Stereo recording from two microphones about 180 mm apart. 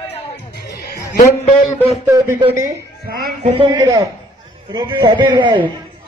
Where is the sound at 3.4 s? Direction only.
25° right (ahead or behind).